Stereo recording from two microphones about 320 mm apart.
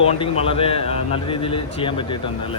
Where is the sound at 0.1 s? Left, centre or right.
Centre.